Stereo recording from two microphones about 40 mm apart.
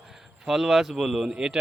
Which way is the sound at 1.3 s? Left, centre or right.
Centre.